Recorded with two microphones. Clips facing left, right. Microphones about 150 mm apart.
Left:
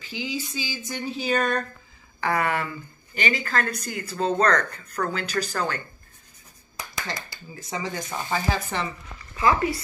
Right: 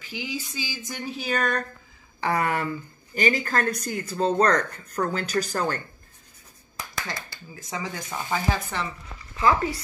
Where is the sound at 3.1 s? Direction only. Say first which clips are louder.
Right 2 dB; 40° right (ahead or behind).